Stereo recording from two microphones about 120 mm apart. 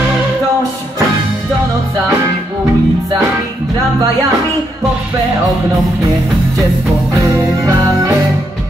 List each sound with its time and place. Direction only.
7.2 s music: 25° right (ahead or behind)